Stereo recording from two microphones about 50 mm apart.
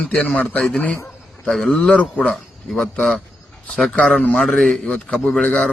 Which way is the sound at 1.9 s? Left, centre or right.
Left.